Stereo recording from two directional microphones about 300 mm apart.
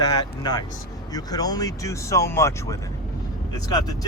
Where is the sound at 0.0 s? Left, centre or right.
Centre.